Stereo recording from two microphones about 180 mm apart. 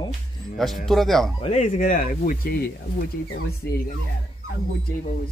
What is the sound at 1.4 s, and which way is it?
Speech, 40° left (ahead or behind).